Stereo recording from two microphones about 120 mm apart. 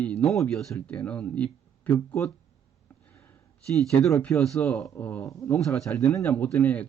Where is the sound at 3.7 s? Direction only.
Centre (ahead or behind).